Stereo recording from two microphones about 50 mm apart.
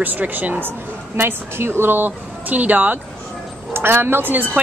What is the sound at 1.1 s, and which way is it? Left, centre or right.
A woman's voice, right.